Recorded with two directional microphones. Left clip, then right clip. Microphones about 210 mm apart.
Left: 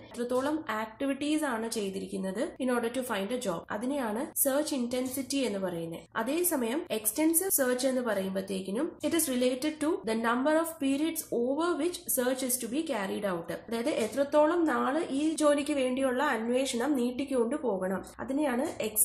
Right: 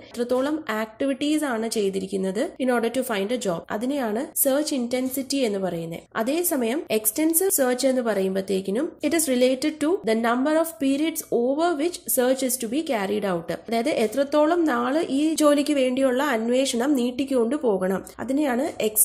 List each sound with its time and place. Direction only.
0.2 s a woman's voice: 35° right (ahead or behind)